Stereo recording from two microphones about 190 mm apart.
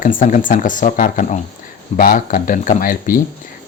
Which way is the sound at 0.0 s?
45° left (ahead or behind).